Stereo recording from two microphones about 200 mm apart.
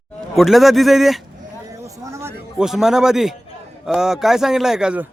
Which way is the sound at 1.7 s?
15° right (ahead or behind).